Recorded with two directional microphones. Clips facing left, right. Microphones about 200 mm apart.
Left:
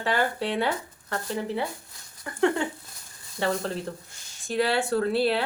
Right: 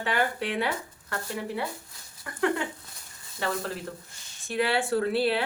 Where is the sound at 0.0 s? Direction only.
35° left (ahead or behind).